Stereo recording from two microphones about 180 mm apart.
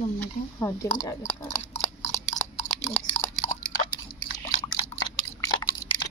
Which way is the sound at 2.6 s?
10° left (ahead or behind).